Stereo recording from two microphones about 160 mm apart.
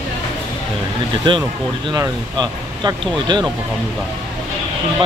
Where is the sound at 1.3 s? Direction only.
30° right (ahead or behind).